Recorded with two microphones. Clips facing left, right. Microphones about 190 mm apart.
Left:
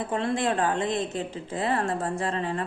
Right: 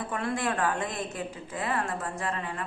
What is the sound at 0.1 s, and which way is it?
A woman's voice, 25° left (ahead or behind).